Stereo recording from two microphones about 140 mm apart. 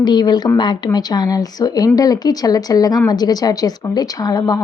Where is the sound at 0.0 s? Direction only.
30° left (ahead or behind).